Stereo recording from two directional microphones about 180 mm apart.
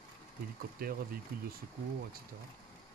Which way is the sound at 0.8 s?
55° right (ahead or behind).